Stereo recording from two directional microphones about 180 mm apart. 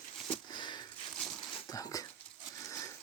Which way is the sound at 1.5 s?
25° left (ahead or behind).